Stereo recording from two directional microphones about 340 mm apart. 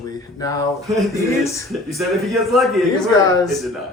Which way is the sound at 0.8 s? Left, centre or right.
Centre.